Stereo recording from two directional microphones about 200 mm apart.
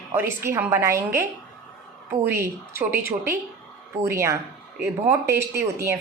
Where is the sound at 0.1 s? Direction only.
10° right (ahead or behind).